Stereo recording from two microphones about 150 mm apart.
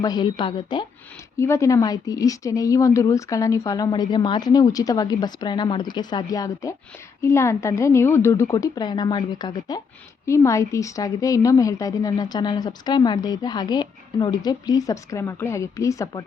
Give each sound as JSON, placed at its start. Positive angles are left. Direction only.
{"t": 0.0, "sound": "speech", "side_deg": 25}
{"t": 1.4, "sound": "a woman's voice", "side_deg": 20}